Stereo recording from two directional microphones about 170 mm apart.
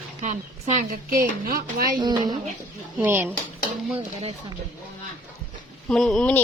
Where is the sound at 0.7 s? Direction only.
55° right (ahead or behind).